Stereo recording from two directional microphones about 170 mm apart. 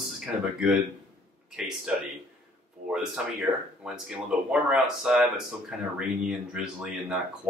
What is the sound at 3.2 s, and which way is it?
A man's voice, 5° right (ahead or behind).